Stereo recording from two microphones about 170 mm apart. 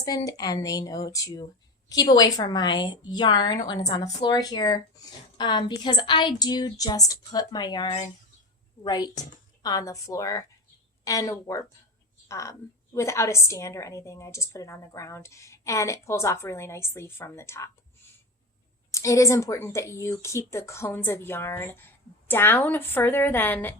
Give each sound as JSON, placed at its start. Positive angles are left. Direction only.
{"t": 0.0, "sound": "a woman's voice", "side_deg": 20}
{"t": 18.9, "sound": "a woman's voice", "side_deg": 20}